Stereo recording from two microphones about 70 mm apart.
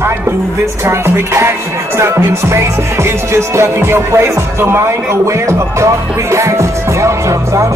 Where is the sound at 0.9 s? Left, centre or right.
Right.